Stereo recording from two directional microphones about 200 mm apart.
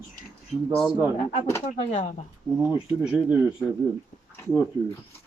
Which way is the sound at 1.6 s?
40° left (ahead or behind).